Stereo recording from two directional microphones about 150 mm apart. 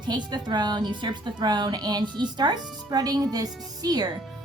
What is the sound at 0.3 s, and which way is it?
A woman's voice, 30° right (ahead or behind).